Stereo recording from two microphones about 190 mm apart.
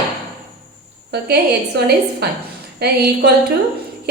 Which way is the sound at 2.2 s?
60° right (ahead or behind).